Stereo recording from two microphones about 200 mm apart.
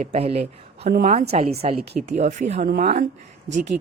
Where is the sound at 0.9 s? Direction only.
40° right (ahead or behind).